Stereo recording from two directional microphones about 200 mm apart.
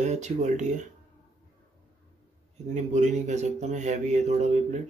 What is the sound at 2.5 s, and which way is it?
Speech, 35° right (ahead or behind).